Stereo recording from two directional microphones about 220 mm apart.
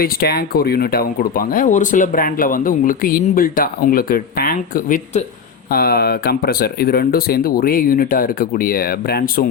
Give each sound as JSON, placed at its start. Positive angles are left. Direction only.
{"t": 0.0, "sound": "speech", "side_deg": 45}